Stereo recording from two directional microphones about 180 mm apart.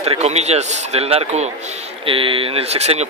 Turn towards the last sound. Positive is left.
turn(degrees=-35)  # may be behind; listen again after turning